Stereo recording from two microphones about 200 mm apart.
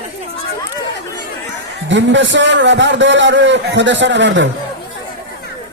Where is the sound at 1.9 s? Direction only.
65° right (ahead or behind).